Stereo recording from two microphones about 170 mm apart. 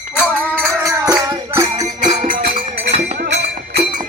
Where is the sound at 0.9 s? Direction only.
20° right (ahead or behind).